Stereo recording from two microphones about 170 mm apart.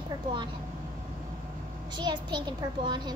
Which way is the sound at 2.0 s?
25° right (ahead or behind).